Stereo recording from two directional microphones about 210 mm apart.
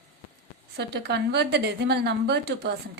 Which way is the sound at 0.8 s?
50° right (ahead or behind).